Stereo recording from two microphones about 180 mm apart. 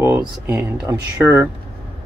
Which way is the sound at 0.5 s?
10° right (ahead or behind).